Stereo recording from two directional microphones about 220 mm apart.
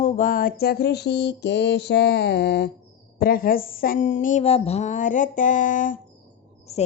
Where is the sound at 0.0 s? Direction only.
40° left (ahead or behind).